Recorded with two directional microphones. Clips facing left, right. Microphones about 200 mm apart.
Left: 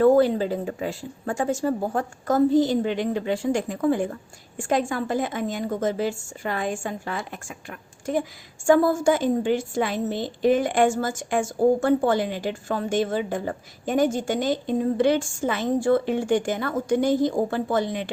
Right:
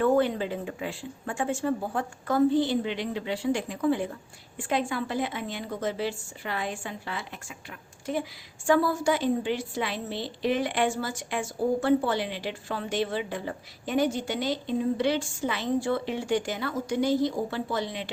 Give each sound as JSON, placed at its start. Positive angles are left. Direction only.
{"t": 0.0, "sound": "a woman's voice", "side_deg": 35}